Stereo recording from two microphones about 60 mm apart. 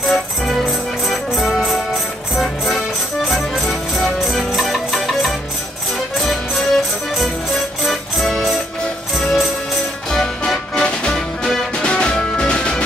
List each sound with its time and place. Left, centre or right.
0.1 s music: centre